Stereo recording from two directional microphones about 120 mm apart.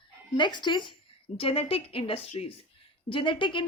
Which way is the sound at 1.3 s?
50° left (ahead or behind).